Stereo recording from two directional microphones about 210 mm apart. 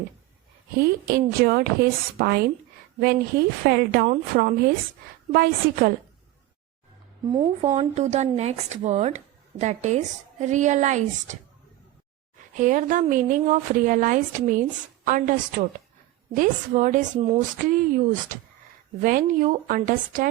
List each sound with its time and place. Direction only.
0.8 s a woman's voice: 45° right (ahead or behind)
7.3 s speech: 20° right (ahead or behind)
7.8 s speech: 30° right (ahead or behind)
12.5 s speech: 40° right (ahead or behind)